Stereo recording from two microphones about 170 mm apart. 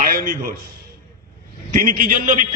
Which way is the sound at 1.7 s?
55° right (ahead or behind).